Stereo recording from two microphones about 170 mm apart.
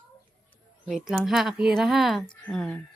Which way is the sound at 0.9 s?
5° right (ahead or behind).